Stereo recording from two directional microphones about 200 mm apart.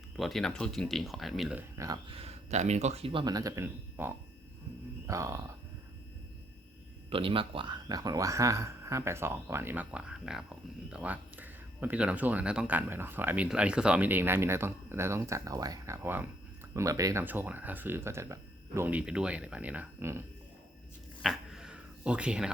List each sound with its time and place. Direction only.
0.2 s speech: centre (ahead or behind)
1.8 s speech: 20° right (ahead or behind)
7.1 s speech: 25° right (ahead or behind)
21.2 s dog: centre (ahead or behind)